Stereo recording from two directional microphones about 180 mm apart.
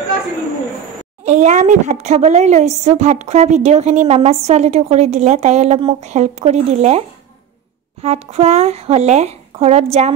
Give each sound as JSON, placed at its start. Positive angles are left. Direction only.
{"t": 1.2, "sound": "speech", "side_deg": -40}